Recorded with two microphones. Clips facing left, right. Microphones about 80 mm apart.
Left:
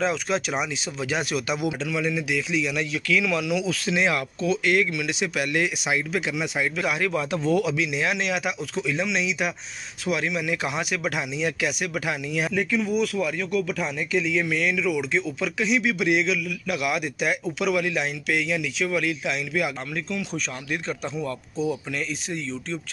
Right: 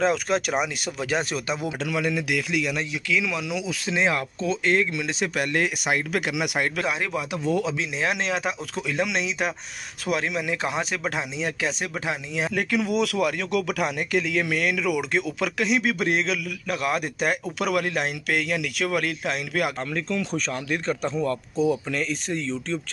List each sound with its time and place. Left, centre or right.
0.0 s a man's voice: right
2.9 s speech: centre; by 6.3 s right
6.3 s speech: right
6.8 s speech: right
8.7 s a man's voice: right
12.5 s a man's voice: right